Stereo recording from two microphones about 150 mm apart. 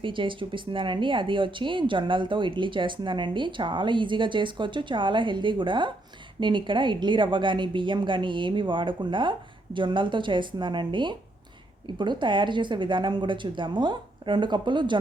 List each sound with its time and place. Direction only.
0.0 s speech: 35° right (ahead or behind)